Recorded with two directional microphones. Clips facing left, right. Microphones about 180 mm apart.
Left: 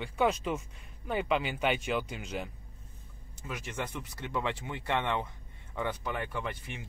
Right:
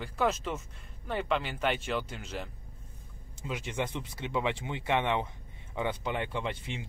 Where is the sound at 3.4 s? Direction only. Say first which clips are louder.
Right 3 dB; 20° right (ahead or behind).